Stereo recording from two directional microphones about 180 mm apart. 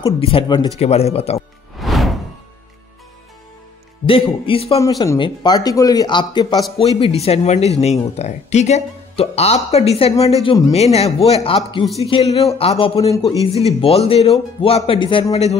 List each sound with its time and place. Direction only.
0.2 s speech: 30° left (ahead or behind)
1.8 s music: centre (ahead or behind)
4.0 s speech: 30° left (ahead or behind)
4.7 s speech: 20° left (ahead or behind)